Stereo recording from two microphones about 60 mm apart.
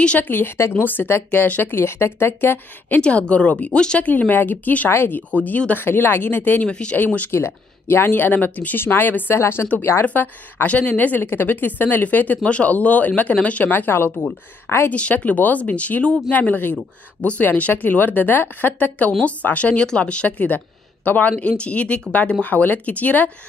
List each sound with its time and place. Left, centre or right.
0.2 s speech: left
0.6 s speech: left
0.8 s speech: left
3.0 s speech: left
4.1 s speech: left
5.3 s speech: left
6.6 s speech: centre
7.2 s speech: left
9.4 s speech: left
10.0 s speech: left
14.9 s speech: left